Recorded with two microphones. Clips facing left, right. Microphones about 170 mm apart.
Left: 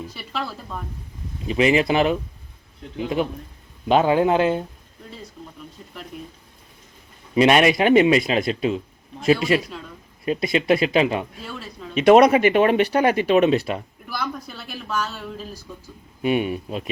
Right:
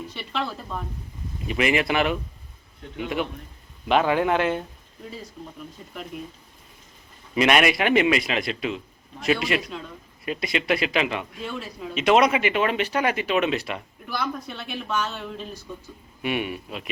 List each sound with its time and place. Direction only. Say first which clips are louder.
0.1 s speech: right 1 dB; 5° left (ahead or behind)
1.5 s speech: left 5 dB; 30° left (ahead or behind)
7.3 s speech: left 4 dB; 30° left (ahead or behind)
11.4 s speech: right 3 dB; centre (ahead or behind)
12.0 s speech: left 6 dB; 40° left (ahead or behind)
14.1 s speech: even; 5° left (ahead or behind)
16.2 s speech: left 6 dB; 35° left (ahead or behind)